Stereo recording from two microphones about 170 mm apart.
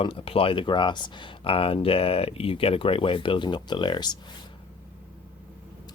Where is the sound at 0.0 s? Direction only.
35° left (ahead or behind).